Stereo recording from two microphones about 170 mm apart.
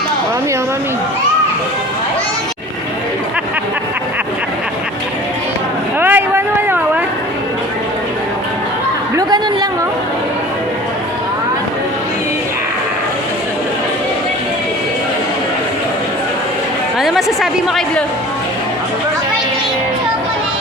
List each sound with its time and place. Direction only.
6.0 s a sound: 10° right (ahead or behind)
9.1 s chatter: 25° right (ahead or behind)
17.0 s a woman's voice: centre (ahead or behind)